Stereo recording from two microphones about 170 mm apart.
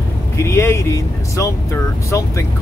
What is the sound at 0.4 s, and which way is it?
Speech, 15° left (ahead or behind).